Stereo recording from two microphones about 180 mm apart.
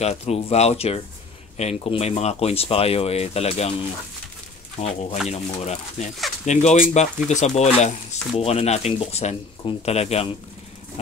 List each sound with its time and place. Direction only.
0.0 s speech: 35° left (ahead or behind)
4.8 s speech: 30° left (ahead or behind)